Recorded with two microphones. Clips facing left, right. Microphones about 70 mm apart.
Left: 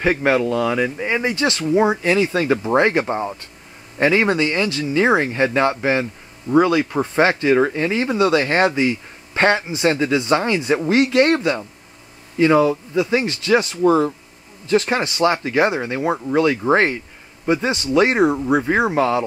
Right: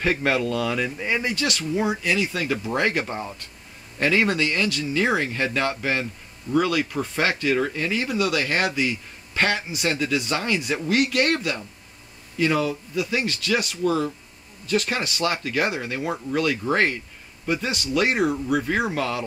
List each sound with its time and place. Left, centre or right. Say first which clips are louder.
0.0 s speech: left 5 dB; centre